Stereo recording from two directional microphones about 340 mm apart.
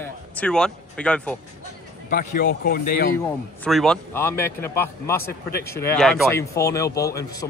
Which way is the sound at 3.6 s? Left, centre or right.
Centre.